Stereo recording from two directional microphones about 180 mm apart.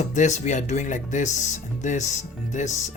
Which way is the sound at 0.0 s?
40° left (ahead or behind).